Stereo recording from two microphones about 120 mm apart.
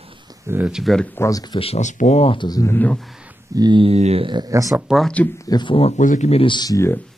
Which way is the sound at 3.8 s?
60° right (ahead or behind).